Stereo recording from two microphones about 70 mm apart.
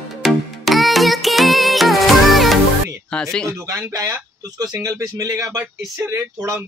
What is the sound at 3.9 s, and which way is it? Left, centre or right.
Speech, right.